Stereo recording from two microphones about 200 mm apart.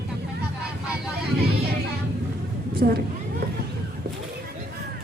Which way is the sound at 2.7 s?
50° right (ahead or behind).